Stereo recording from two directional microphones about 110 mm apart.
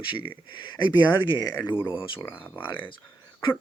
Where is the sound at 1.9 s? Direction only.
50° left (ahead or behind).